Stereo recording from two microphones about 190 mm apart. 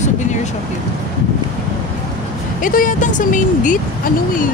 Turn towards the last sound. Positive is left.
turn(degrees=45)  # may be behind; listen again after turning